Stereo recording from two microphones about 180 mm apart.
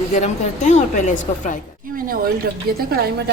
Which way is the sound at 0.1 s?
40° left (ahead or behind).